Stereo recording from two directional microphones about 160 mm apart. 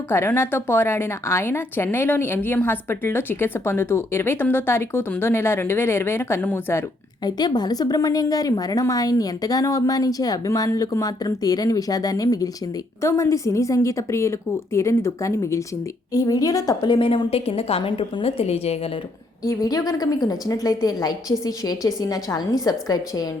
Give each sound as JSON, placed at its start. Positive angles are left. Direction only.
{"t": 0.1, "sound": "speech", "side_deg": 15}
{"t": 7.3, "sound": "a woman's voice", "side_deg": 25}
{"t": 19.5, "sound": "a woman's voice", "side_deg": 25}